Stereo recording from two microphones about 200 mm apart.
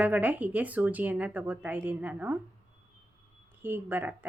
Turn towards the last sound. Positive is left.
turn(degrees=-10)  # may be behind; listen again after turning